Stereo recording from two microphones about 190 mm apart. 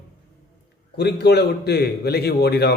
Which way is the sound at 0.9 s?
60° left (ahead or behind).